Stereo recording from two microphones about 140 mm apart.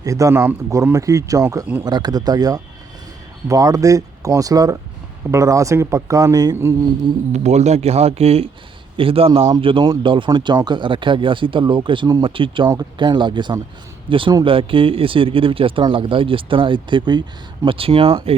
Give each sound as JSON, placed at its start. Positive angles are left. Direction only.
{"t": 0.0, "sound": "speech", "side_deg": -25}
{"t": 7.3, "sound": "speech", "side_deg": -55}